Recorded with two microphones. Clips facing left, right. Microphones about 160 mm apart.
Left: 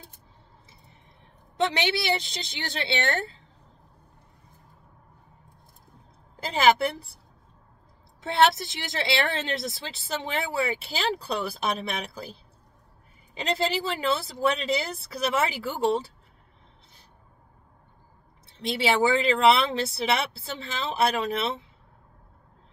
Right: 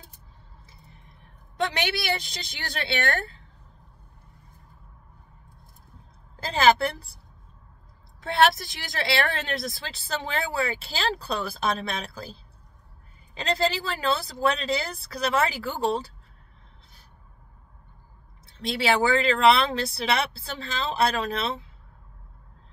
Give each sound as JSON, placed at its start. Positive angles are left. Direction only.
{"t": 1.6, "sound": "speech", "side_deg": 25}
{"t": 6.4, "sound": "speech", "side_deg": 20}
{"t": 8.2, "sound": "speech", "side_deg": 20}
{"t": 18.7, "sound": "speech", "side_deg": 20}